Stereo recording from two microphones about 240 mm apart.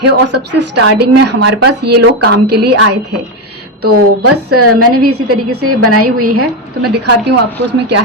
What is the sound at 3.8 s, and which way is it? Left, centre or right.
A woman's voice, right.